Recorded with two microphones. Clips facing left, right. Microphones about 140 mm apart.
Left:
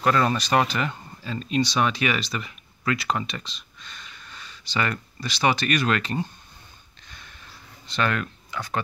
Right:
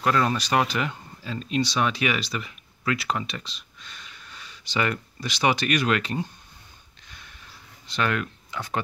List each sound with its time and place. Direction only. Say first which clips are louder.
0.0 s speech: left 1 dB; centre (ahead or behind)
7.8 s speech: left 1 dB; 10° right (ahead or behind)
8.5 s speech: left 1 dB; 25° right (ahead or behind)